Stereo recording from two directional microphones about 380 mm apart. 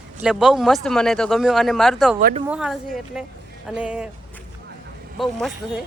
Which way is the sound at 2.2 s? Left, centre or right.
Right.